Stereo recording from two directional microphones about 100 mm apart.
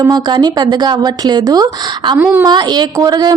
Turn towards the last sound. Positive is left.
turn(degrees=-40)  # may be behind; listen again after turning